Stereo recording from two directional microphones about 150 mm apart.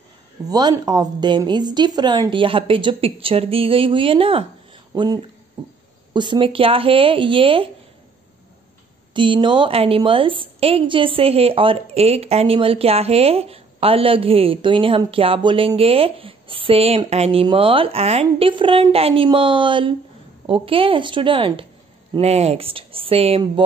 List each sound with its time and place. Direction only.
0.5 s a woman's voice: 25° right (ahead or behind)
9.1 s a woman's voice: 35° right (ahead or behind)